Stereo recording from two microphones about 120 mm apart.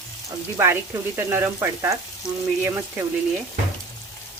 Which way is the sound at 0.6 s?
20° right (ahead or behind).